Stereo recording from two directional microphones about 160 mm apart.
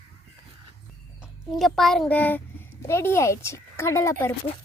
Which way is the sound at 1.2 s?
Centre (ahead or behind).